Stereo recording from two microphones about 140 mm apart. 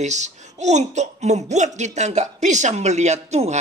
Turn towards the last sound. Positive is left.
turn(degrees=-55)  # may be behind; listen again after turning